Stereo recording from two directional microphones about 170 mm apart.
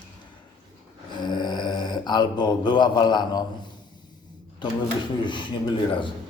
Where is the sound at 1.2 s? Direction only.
25° left (ahead or behind).